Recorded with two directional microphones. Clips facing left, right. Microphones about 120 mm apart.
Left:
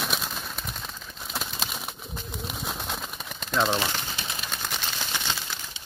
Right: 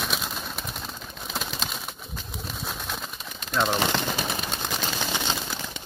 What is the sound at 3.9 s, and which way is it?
Speech, 65° right (ahead or behind).